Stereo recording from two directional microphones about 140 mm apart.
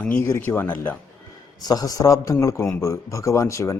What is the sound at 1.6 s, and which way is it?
A man's voice, 25° left (ahead or behind).